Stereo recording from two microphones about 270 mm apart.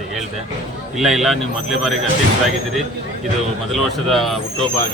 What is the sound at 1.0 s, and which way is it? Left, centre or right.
Speech, centre.